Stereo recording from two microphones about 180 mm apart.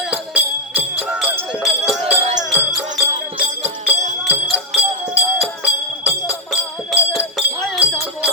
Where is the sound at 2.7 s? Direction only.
Centre (ahead or behind).